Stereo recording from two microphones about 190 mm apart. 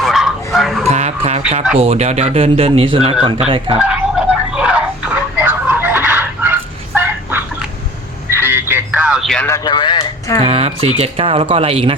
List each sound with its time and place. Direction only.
0.0 s bow-wow: centre (ahead or behind)
0.9 s dog: 35° right (ahead or behind)
1.8 s speech: 35° right (ahead or behind)
3.8 s a sound: 5° right (ahead or behind)
9.5 s a sound: 25° left (ahead or behind)
10.4 s speech: 30° right (ahead or behind)